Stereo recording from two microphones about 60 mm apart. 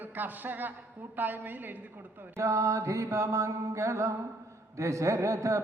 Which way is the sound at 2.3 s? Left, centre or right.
Right.